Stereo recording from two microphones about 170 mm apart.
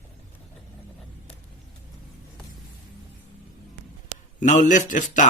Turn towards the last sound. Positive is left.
turn(degrees=50)  # may be behind; listen again after turning